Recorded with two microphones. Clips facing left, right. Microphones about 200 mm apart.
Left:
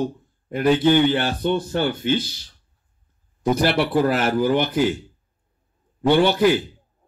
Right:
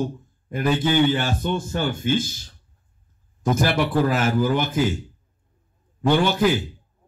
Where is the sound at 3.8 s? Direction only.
10° left (ahead or behind).